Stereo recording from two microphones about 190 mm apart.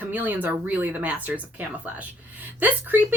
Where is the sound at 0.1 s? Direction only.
10° right (ahead or behind).